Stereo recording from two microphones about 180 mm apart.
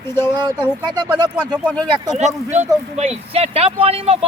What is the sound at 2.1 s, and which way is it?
Speech, 40° right (ahead or behind).